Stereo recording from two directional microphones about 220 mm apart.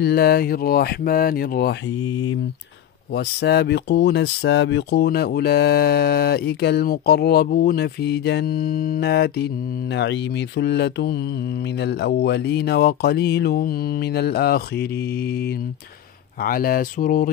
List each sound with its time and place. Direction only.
0.0 s speech: 45° left (ahead or behind)
3.2 s speech: 50° left (ahead or behind)
16.4 s speech: 40° left (ahead or behind)